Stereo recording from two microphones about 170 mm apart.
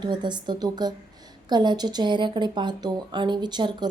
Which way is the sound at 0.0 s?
25° right (ahead or behind).